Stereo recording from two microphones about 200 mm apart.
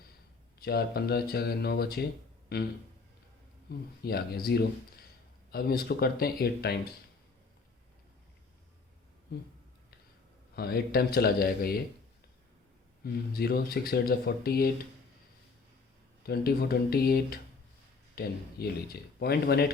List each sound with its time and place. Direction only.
0.6 s speech: 50° left (ahead or behind)
3.7 s speech: 50° left (ahead or behind)
9.3 s speech: 55° left (ahead or behind)
10.5 s speech: 50° left (ahead or behind)
13.3 s speech: 50° left (ahead or behind)
16.2 s speech: 50° left (ahead or behind)